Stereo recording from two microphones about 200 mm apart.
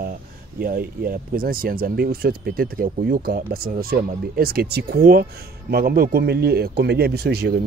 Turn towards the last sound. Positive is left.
turn(degrees=-55)  # may be behind; listen again after turning